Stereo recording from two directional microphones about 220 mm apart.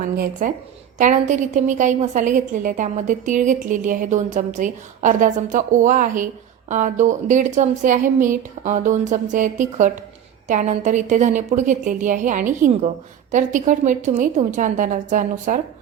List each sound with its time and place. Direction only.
0.0 s a woman's voice: 40° right (ahead or behind)